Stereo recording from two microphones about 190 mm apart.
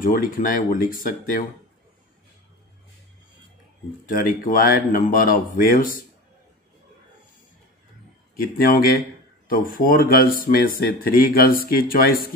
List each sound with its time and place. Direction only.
0.0 s speech: 45° left (ahead or behind)
4.1 s speech: 45° left (ahead or behind)
8.4 s speech: 50° left (ahead or behind)